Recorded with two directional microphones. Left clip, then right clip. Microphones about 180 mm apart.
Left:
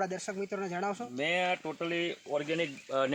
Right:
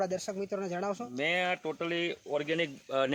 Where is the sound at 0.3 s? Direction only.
45° right (ahead or behind).